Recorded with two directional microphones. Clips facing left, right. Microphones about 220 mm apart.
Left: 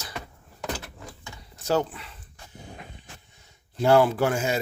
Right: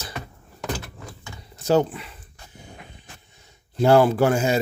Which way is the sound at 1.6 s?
20° right (ahead or behind).